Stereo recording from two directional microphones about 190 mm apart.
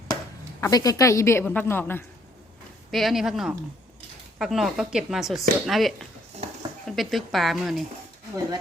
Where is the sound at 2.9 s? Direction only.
Centre (ahead or behind).